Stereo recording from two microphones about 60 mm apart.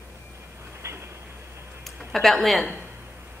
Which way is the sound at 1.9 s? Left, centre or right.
Centre.